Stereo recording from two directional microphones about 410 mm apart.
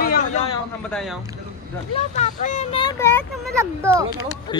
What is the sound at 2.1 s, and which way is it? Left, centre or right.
Speech, centre.